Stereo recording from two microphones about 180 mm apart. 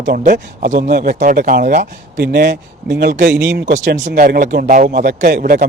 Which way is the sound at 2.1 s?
65° right (ahead or behind).